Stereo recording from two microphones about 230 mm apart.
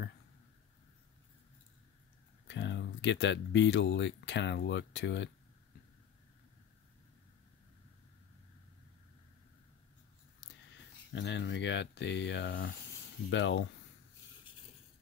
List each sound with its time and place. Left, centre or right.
2.4 s speech: left
11.1 s speech: left